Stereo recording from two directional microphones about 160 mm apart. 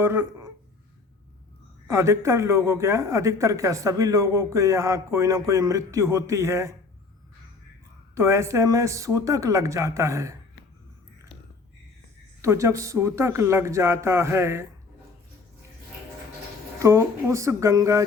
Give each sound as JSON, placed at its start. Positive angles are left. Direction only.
{"t": 0.0, "sound": "speech", "side_deg": -15}
{"t": 1.9, "sound": "speech", "side_deg": -15}
{"t": 8.1, "sound": "speech", "side_deg": -15}
{"t": 12.4, "sound": "speech", "side_deg": -20}
{"t": 16.8, "sound": "speech", "side_deg": -20}